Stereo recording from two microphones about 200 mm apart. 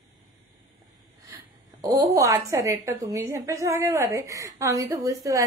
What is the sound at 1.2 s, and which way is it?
A woman's voice, 15° right (ahead or behind).